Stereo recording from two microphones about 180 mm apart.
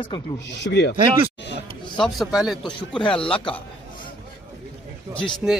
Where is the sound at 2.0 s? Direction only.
Centre (ahead or behind).